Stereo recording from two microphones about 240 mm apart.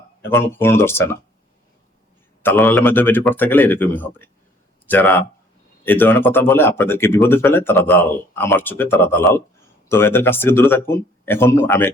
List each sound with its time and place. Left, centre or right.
0.2 s speech: centre
2.4 s speech: centre